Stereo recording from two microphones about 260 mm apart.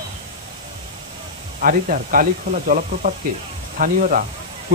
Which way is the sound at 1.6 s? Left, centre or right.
Right.